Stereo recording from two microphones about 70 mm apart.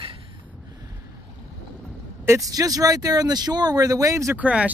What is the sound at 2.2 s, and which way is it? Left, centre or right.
Speech, right.